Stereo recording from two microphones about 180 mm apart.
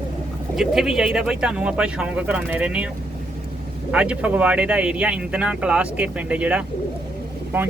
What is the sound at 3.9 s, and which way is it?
Speech, 5° right (ahead or behind).